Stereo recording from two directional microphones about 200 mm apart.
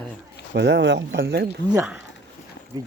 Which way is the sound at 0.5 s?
60° right (ahead or behind).